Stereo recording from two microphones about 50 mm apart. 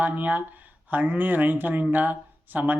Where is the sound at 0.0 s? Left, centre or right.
Right.